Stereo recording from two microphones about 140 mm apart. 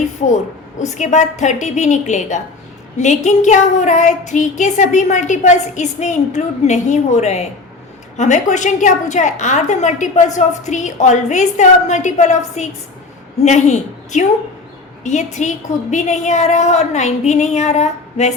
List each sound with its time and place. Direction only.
0.9 s a woman's voice: 55° left (ahead or behind)